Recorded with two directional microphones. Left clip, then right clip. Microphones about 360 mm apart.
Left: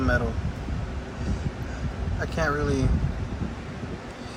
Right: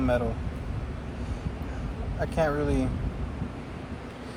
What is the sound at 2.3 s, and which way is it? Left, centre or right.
Speech, centre.